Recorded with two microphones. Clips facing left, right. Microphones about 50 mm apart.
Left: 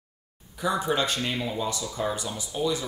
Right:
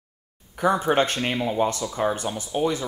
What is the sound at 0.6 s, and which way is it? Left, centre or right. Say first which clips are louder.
Speech: right 5 dB; right.